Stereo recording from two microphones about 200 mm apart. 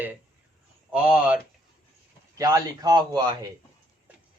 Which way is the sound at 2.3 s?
15° right (ahead or behind).